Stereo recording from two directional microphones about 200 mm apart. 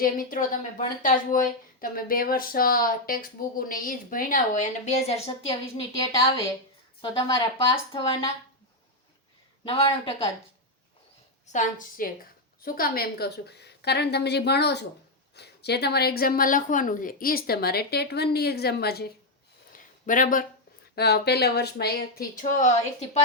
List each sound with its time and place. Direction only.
0.0 s speech: 45° left (ahead or behind); by 7.8 s 20° left (ahead or behind)
9.6 s speech: 30° left (ahead or behind)
11.4 s a woman's voice: 40° left (ahead or behind)
19.7 s a sound: 40° left (ahead or behind)
20.9 s speech: 55° left (ahead or behind); by 23.0 s 40° left (ahead or behind)